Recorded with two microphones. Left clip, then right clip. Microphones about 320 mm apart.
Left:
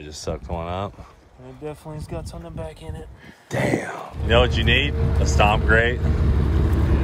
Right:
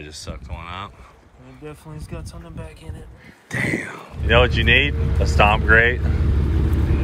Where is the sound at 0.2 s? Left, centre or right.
Left.